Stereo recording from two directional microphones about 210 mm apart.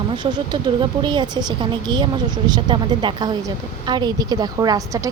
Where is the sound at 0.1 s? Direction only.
20° right (ahead or behind).